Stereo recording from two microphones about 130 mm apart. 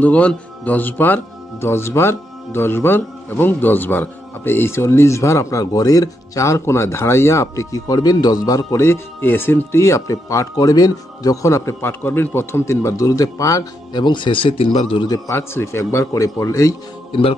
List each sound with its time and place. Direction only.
0.0 s speech: 10° left (ahead or behind); by 15.0 s 50° left (ahead or behind)
15.0 s speech: 25° left (ahead or behind)